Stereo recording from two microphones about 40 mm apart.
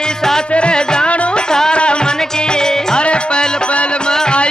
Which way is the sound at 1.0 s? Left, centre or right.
Left.